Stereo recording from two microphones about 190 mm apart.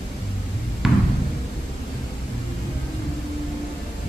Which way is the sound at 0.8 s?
Centre (ahead or behind).